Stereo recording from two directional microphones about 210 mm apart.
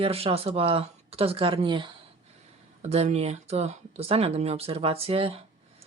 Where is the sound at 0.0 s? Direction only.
25° right (ahead or behind).